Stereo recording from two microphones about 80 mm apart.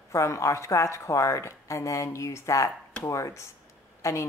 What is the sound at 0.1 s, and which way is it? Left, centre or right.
Speech, left.